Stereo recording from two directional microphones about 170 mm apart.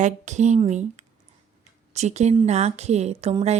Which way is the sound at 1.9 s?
40° right (ahead or behind).